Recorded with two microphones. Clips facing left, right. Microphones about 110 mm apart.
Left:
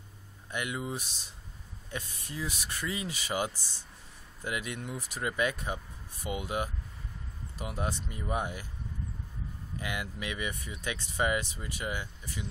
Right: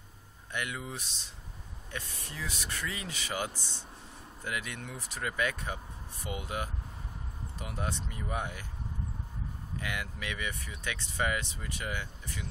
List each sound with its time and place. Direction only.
0.5 s speech: 15° left (ahead or behind)
4.5 s speech: 15° left (ahead or behind)
9.8 s speech: 15° left (ahead or behind)